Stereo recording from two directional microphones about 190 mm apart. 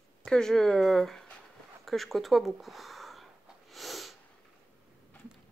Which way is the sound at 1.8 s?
Centre (ahead or behind).